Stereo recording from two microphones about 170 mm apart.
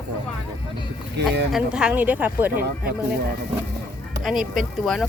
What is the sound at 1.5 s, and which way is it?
Speech, 5° right (ahead or behind).